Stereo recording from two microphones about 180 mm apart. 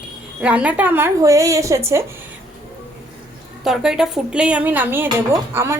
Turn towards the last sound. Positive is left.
turn(degrees=-15)  # may be behind; listen again after turning